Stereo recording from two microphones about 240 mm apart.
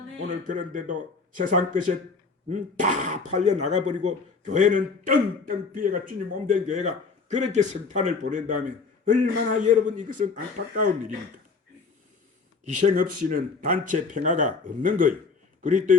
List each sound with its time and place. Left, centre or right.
0.4 s speech: right
12.6 s speech: right